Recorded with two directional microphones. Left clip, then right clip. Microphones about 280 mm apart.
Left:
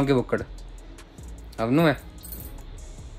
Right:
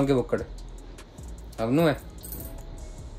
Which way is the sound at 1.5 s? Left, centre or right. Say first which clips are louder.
Left 2 dB; left.